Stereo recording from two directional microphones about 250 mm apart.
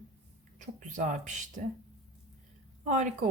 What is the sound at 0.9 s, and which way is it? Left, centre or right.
Speech, right.